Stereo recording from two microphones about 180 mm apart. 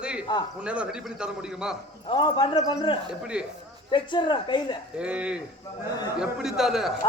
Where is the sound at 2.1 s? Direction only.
25° left (ahead or behind).